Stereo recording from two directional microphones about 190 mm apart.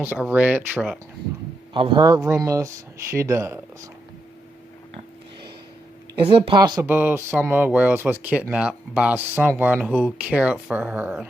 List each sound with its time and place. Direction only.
0.0 s speech: 10° right (ahead or behind)
1.7 s speech: 25° right (ahead or behind)
6.1 s speech: 30° right (ahead or behind)
6.8 s speech: 10° right (ahead or behind)